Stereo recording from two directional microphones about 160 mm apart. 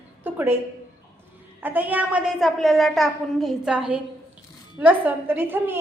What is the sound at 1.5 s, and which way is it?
A child's voice, 10° right (ahead or behind).